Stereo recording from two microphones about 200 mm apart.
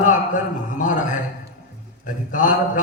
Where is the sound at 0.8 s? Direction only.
40° left (ahead or behind).